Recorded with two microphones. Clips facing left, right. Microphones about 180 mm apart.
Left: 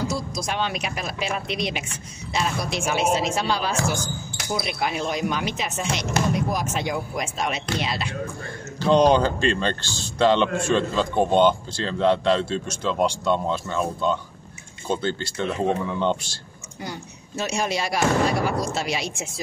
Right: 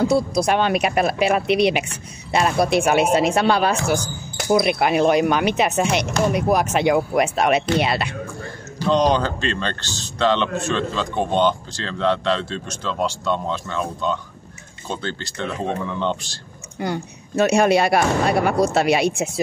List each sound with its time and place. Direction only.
0.1 s speech: 60° right (ahead or behind)
8.8 s speech: 10° left (ahead or behind)
16.8 s speech: 60° right (ahead or behind)